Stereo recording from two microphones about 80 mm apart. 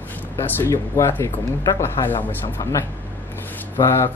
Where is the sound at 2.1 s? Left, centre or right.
Left.